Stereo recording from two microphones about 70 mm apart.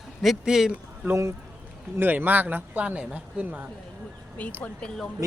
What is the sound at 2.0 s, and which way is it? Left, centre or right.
Speech, right.